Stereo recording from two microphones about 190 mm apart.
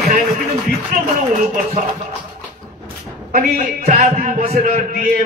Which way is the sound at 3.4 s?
45° right (ahead or behind).